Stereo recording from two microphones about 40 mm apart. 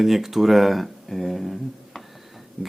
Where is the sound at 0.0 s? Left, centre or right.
Centre.